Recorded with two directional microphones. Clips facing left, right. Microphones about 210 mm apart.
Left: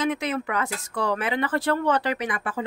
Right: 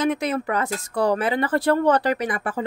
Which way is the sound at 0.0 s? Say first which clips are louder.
Right 3 dB; 40° right (ahead or behind).